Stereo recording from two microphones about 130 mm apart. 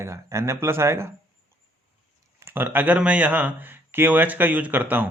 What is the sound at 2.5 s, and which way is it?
Speech, 15° right (ahead or behind).